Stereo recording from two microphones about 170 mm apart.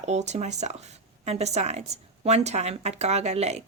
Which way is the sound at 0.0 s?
40° right (ahead or behind).